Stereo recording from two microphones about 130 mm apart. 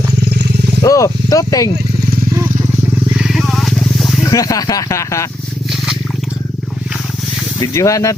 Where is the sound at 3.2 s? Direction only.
5° right (ahead or behind).